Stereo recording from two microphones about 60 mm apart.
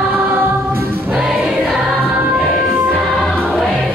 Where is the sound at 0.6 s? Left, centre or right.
Right.